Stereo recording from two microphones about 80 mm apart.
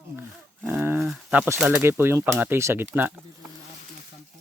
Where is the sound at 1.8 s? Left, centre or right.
Right.